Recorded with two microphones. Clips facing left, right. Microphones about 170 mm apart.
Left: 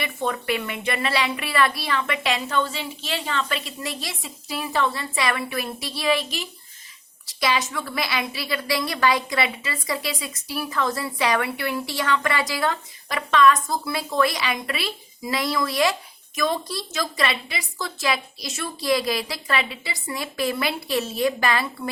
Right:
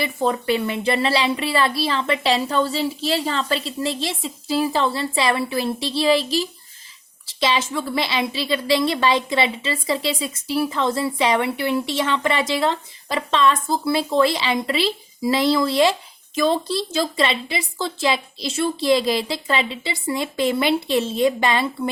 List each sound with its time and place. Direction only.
0.0 s a woman's voice: 30° right (ahead or behind)